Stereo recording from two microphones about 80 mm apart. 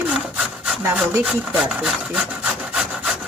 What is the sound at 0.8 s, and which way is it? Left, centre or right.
Speech, right.